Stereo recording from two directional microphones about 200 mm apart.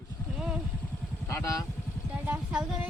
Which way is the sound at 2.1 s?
5° right (ahead or behind).